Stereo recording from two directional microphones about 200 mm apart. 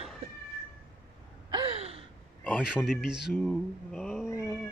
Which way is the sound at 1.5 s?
25° right (ahead or behind).